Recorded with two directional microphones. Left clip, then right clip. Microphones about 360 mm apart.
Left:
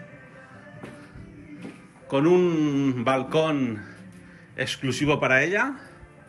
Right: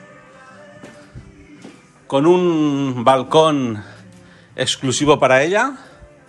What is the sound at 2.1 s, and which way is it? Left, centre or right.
A man's voice, centre.